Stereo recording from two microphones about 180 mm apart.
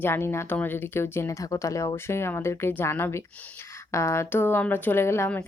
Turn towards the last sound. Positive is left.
turn(degrees=15)  # may be behind; listen again after turning